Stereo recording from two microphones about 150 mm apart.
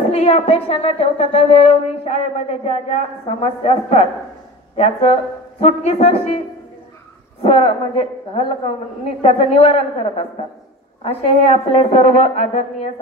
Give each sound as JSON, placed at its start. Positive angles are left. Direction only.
{"t": 0.1, "sound": "a woman's voice", "side_deg": 45}
{"t": 7.4, "sound": "a woman's voice", "side_deg": 40}
{"t": 11.5, "sound": "a woman's voice", "side_deg": 40}